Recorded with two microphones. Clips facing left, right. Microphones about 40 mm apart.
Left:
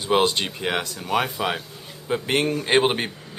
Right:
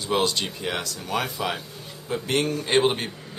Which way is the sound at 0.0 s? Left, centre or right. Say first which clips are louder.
Left 4 dB; left.